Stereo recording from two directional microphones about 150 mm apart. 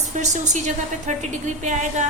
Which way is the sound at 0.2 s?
55° right (ahead or behind).